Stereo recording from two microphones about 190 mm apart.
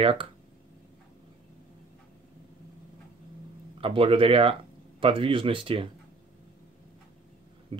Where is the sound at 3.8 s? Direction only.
30° right (ahead or behind).